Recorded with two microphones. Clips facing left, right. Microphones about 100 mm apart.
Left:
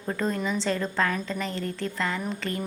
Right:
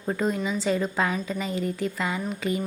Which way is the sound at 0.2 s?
10° right (ahead or behind).